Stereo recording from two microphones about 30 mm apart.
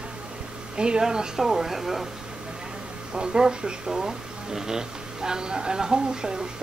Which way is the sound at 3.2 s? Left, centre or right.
Right.